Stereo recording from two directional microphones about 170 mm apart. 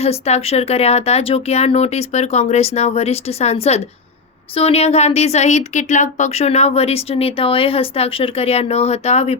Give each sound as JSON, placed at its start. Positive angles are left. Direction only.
{"t": 0.0, "sound": "speech", "side_deg": 40}